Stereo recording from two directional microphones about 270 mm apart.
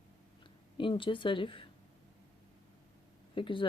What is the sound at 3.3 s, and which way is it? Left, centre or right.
Speech, centre.